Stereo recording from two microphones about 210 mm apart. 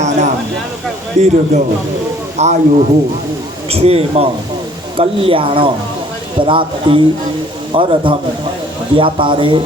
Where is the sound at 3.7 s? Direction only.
30° right (ahead or behind).